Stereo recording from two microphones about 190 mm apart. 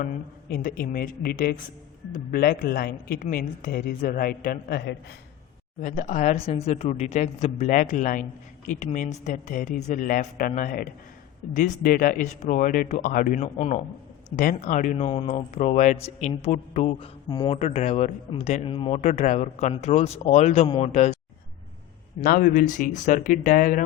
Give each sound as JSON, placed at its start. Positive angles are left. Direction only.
{"t": 0.0, "sound": "speech", "side_deg": 45}
{"t": 5.8, "sound": "speech", "side_deg": 40}
{"t": 22.2, "sound": "speech", "side_deg": 50}